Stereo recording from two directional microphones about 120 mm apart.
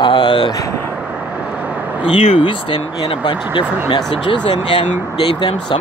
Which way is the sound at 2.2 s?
50° left (ahead or behind).